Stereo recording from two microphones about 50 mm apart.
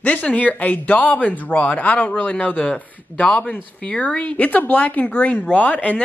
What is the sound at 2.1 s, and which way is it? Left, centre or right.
Speech, left.